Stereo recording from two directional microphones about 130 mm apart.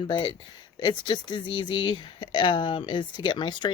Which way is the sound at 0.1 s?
35° left (ahead or behind).